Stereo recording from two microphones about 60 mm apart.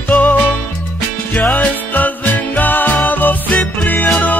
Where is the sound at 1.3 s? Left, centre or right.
Left.